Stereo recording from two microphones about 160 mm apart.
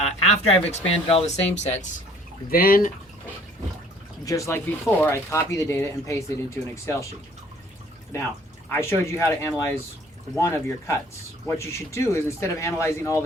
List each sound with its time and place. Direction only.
0.0 s speech: 40° left (ahead or behind)
2.5 s speech: 65° left (ahead or behind)
4.3 s speech: 20° left (ahead or behind)
8.7 s speech: 15° left (ahead or behind)